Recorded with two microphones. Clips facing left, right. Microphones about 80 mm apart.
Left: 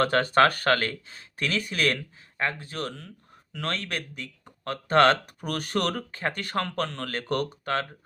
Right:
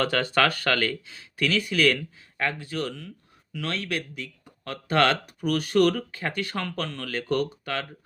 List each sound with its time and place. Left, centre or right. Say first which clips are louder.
0.0 s speech: left 3 dB; left
3.5 s speech: right 1 dB; left